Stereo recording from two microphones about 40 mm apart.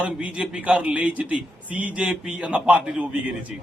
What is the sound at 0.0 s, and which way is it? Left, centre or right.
A man's voice, right.